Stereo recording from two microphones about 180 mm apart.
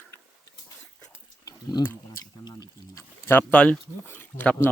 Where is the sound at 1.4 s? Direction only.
20° left (ahead or behind).